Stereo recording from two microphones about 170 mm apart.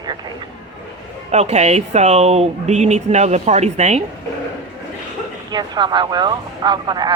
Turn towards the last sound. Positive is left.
turn(degrees=-25)  # may be behind; listen again after turning